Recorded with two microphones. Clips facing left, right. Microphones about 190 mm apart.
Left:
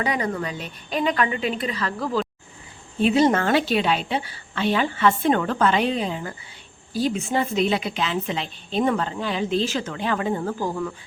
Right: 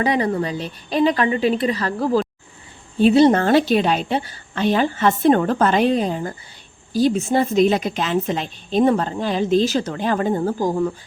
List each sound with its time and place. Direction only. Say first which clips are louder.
0.0 s a woman's voice: right 5 dB; 35° right (ahead or behind)